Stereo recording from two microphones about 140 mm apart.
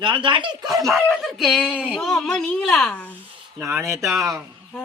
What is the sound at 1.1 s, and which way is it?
A child's voice, centre (ahead or behind).